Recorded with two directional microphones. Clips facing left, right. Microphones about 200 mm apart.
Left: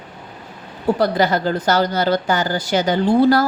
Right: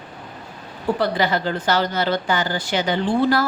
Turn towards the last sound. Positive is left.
turn(degrees=40)  # may be behind; listen again after turning